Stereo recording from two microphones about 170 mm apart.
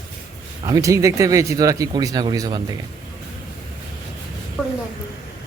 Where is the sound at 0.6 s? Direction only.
20° right (ahead or behind).